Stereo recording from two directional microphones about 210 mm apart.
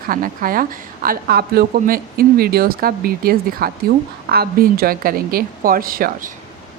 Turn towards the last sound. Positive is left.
turn(degrees=-45)  # may be behind; listen again after turning